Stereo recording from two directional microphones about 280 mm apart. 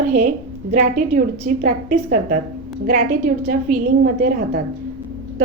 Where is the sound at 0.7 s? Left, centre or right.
Right.